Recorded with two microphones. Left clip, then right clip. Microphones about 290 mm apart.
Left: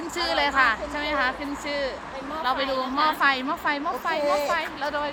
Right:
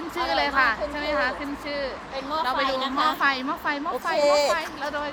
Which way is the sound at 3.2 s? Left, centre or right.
Centre.